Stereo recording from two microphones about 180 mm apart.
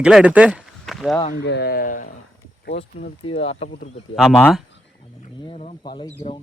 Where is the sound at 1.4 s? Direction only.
70° left (ahead or behind); by 2.1 s 50° left (ahead or behind).